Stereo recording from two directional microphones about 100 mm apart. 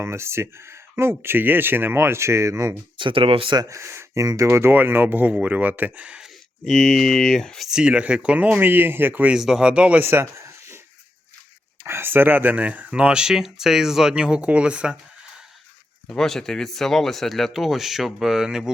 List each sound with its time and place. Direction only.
0.0 s speech: 25° right (ahead or behind)
3.0 s speech: 60° right (ahead or behind)
3.6 s speech: 30° right (ahead or behind); by 6.2 s 15° right (ahead or behind)
6.7 s speech: 5° left (ahead or behind)
7.7 s speech: 10° right (ahead or behind)
9.3 s speech: 5° right (ahead or behind)
10.0 s a sound: 25° right (ahead or behind)
11.8 s speech: 25° right (ahead or behind)
16.0 s speech: 5° left (ahead or behind)